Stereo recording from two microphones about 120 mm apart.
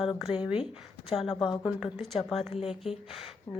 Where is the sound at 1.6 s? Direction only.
10° right (ahead or behind).